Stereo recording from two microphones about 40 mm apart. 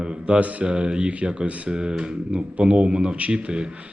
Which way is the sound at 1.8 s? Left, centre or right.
Right.